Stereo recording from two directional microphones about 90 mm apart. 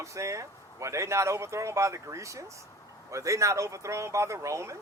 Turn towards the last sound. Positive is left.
turn(degrees=-35)  # may be behind; listen again after turning